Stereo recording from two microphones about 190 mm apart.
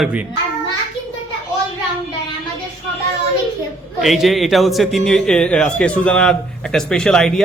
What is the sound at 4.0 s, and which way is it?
A man's voice, centre (ahead or behind).